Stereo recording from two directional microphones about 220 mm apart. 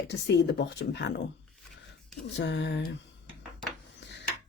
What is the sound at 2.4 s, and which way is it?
Speech, 50° left (ahead or behind).